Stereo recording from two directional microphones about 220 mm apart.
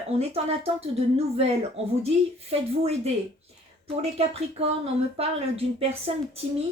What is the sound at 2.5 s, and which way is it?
Speech, 25° right (ahead or behind).